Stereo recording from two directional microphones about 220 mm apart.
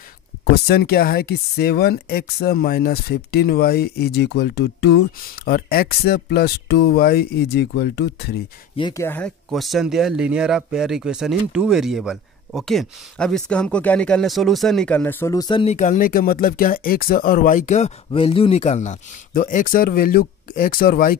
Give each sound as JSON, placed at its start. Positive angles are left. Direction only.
{"t": 0.5, "sound": "speech", "side_deg": 45}
{"t": 8.7, "sound": "speech", "side_deg": 15}